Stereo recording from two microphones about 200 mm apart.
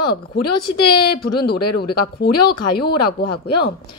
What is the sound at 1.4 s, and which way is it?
Speech, 50° left (ahead or behind).